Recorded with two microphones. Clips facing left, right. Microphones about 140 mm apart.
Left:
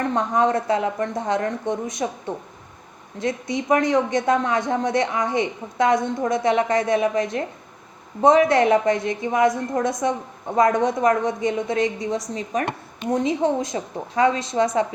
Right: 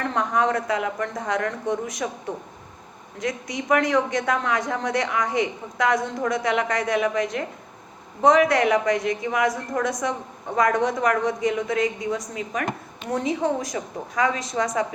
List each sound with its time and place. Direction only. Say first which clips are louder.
0.0 s a woman's voice: left 3 dB; 25° left (ahead or behind)
3.2 s a woman's voice: left 4 dB; 25° left (ahead or behind)